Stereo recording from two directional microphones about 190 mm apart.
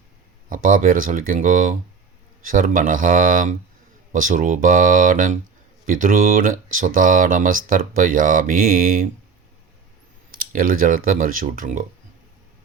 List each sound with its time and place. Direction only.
0.5 s speech: 45° right (ahead or behind)
10.3 s speech: 50° right (ahead or behind)